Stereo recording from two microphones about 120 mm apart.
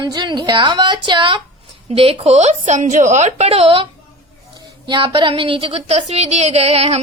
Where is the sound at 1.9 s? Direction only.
55° right (ahead or behind).